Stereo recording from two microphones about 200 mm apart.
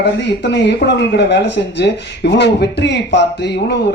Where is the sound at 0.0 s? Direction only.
60° left (ahead or behind).